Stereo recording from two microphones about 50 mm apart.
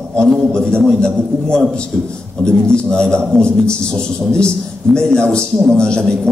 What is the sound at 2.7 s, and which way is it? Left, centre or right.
A man's voice, centre.